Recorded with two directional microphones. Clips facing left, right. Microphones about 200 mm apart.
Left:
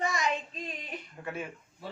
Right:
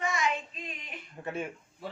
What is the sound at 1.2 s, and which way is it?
Speech, 25° right (ahead or behind).